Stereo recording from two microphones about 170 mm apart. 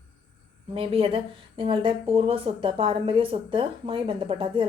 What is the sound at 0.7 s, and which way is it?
A woman's voice, 35° right (ahead or behind).